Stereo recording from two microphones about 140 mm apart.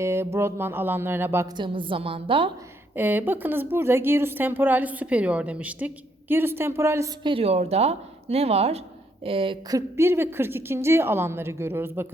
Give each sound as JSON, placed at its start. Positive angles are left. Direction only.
{"t": 0.0, "sound": "a woman's voice", "side_deg": -20}
{"t": 1.5, "sound": "a woman's voice", "side_deg": -35}
{"t": 2.9, "sound": "a woman's voice", "side_deg": -15}
{"t": 7.2, "sound": "a woman's voice", "side_deg": -40}
{"t": 9.6, "sound": "a woman's voice", "side_deg": -20}